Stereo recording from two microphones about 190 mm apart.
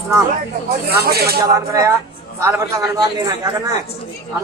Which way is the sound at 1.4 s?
20° right (ahead or behind).